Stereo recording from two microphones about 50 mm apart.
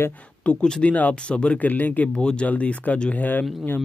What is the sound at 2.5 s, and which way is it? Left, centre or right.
Speech, left.